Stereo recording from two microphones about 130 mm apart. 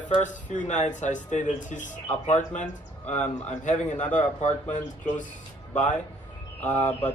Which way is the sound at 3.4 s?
65° left (ahead or behind).